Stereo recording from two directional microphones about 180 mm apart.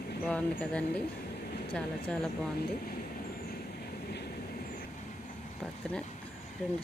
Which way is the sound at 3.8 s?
60° left (ahead or behind).